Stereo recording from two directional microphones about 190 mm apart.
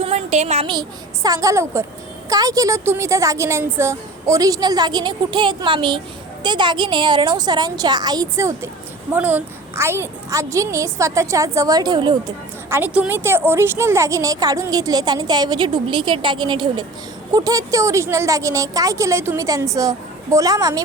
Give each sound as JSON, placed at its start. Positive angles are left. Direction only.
{"t": 0.0, "sound": "a woman's voice", "side_deg": -35}
{"t": 12.7, "sound": "a woman's voice", "side_deg": -10}